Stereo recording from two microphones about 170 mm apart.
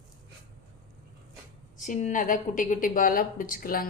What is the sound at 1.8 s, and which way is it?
A woman's voice, 45° left (ahead or behind).